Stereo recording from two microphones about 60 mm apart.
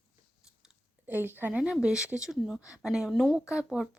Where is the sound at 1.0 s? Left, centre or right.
Right.